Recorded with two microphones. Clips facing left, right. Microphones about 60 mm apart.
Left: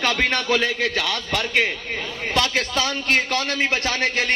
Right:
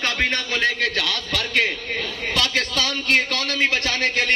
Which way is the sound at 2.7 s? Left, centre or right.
Left.